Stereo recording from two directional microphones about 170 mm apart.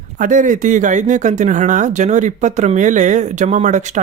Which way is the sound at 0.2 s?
50° right (ahead or behind).